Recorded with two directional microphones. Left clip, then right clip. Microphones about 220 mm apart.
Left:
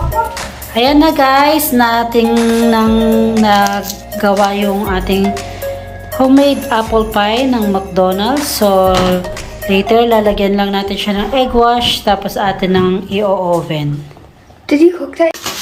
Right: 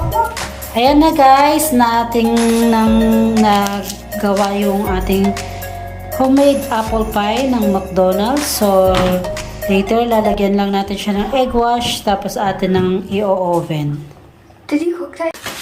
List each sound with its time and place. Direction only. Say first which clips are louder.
0.7 s a woman's voice: left 1 dB; 5° right (ahead or behind)